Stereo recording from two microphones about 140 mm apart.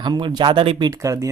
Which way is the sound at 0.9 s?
25° right (ahead or behind).